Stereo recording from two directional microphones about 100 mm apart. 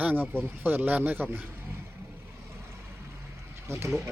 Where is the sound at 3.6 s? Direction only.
25° right (ahead or behind).